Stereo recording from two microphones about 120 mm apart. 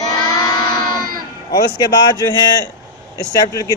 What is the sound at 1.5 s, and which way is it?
Speech, 35° left (ahead or behind).